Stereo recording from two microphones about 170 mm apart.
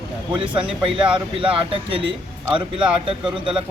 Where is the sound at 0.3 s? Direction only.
30° right (ahead or behind).